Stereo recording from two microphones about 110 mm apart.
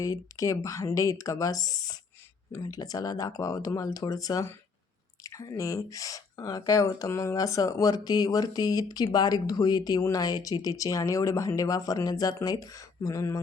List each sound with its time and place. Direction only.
0.0 s speech: 30° left (ahead or behind)